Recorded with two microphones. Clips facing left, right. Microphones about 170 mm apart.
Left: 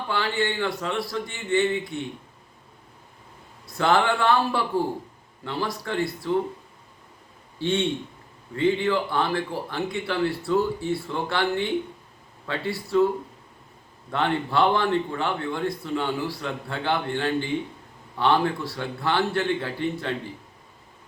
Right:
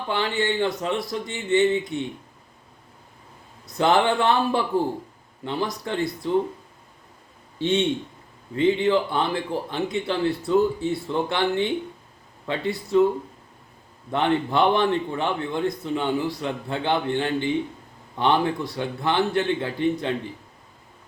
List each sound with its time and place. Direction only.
0.1 s speech: 20° right (ahead or behind)
3.7 s speech: 20° right (ahead or behind)
7.6 s speech: 20° right (ahead or behind)
14.1 s speech: 20° right (ahead or behind)